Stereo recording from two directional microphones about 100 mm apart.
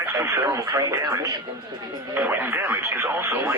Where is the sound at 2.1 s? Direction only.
20° right (ahead or behind).